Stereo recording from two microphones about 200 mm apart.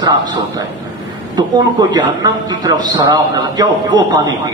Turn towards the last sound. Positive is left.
turn(degrees=-20)  # may be behind; listen again after turning